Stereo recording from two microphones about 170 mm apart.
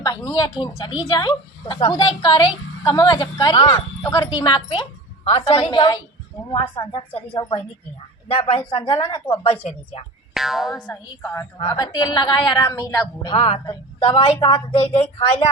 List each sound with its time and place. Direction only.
0.0 s a woman's voice: 25° left (ahead or behind)
10.3 s speech: centre (ahead or behind)
10.8 s a woman's voice: 15° left (ahead or behind)
13.3 s a woman's voice: 35° left (ahead or behind)